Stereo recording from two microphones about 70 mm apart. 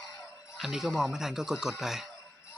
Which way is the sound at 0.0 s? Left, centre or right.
Left.